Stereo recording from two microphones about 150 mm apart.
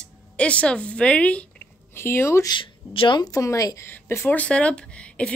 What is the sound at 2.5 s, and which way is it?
Speech, 35° left (ahead or behind).